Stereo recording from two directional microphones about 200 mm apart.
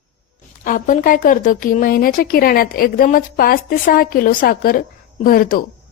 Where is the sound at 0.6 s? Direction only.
40° left (ahead or behind).